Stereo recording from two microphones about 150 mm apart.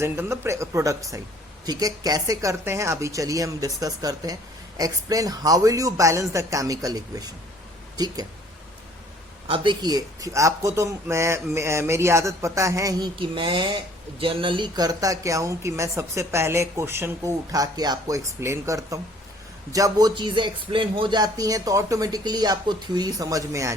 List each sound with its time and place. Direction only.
0.0 s a woman's voice: 20° right (ahead or behind)
9.5 s a woman's voice: 30° right (ahead or behind)